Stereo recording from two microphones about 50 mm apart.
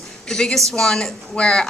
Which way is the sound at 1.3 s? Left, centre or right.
Centre.